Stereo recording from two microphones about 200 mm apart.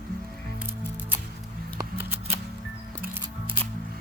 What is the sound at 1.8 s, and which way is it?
Music, 10° right (ahead or behind).